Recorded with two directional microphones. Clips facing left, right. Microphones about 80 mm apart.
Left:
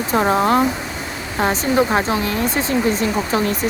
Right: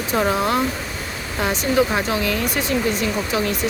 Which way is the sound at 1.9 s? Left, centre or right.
Left.